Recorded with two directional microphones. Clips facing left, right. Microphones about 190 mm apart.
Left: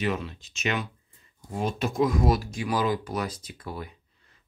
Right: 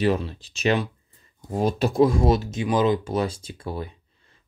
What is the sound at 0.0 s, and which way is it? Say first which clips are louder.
Speech: right 6 dB; 35° right (ahead or behind).